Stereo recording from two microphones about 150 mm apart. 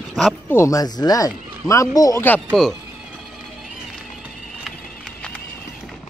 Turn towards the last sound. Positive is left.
turn(degrees=5)  # may be behind; listen again after turning